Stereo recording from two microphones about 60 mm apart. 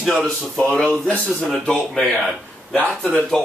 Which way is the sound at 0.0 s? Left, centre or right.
Centre.